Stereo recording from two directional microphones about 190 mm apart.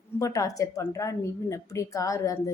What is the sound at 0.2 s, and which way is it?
A woman's voice, 15° left (ahead or behind).